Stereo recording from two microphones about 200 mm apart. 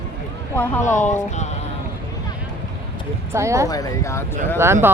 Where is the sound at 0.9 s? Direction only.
35° left (ahead or behind).